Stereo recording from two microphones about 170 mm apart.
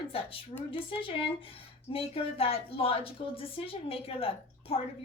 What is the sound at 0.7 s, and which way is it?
A woman's voice, 30° left (ahead or behind).